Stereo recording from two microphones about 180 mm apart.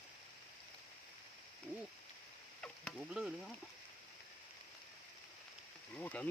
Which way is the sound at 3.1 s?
5° right (ahead or behind).